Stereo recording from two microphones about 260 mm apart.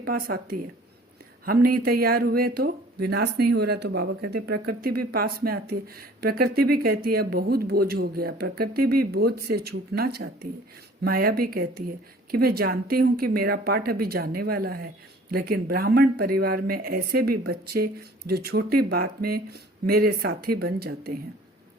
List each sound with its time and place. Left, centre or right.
0.0 s speech: right